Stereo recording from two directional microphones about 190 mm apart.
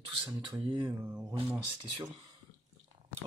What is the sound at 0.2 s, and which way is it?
Speech, 25° right (ahead or behind).